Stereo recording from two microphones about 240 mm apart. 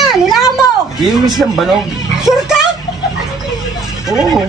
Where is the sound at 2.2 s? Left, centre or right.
Centre.